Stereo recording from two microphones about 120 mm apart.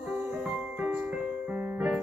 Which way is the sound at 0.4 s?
10° right (ahead or behind).